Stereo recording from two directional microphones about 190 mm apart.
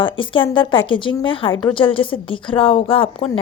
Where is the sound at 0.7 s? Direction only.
25° left (ahead or behind).